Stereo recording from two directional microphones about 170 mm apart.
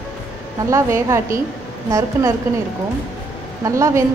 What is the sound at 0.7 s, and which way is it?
Speech, 15° right (ahead or behind).